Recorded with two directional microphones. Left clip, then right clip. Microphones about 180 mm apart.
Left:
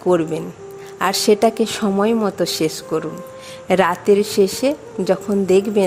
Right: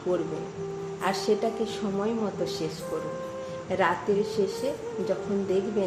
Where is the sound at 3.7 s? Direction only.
60° left (ahead or behind).